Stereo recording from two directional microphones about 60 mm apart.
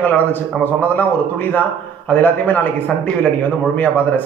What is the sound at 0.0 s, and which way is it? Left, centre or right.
A man's voice, left.